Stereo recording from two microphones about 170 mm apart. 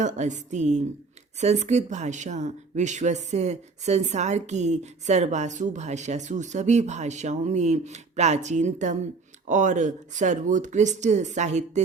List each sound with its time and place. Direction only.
0.0 s speech: 45° right (ahead or behind)